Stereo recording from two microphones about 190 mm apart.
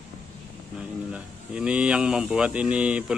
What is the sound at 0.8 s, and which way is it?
Speech, 5° right (ahead or behind).